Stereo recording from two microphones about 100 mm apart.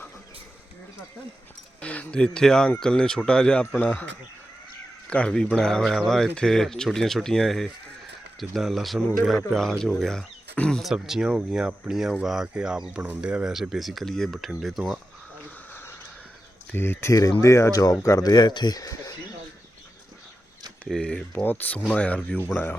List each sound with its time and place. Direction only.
1.8 s speech: 15° left (ahead or behind)
5.0 s speech: 10° left (ahead or behind)
15.7 s a sound: 25° left (ahead or behind)
16.7 s speech: 25° left (ahead or behind)
20.8 s speech: 5° left (ahead or behind)
21.3 s speech: 15° left (ahead or behind)